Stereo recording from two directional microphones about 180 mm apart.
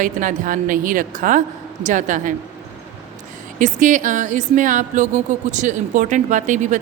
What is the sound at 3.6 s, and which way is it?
Speech, 45° right (ahead or behind).